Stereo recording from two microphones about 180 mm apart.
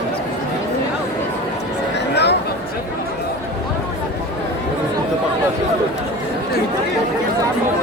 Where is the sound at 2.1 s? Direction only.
70° left (ahead or behind).